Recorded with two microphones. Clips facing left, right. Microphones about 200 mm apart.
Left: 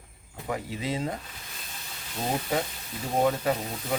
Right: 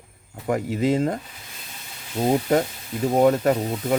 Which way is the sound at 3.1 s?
50° right (ahead or behind).